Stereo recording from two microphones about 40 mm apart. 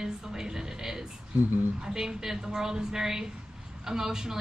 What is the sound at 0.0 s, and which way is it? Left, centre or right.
Music, centre.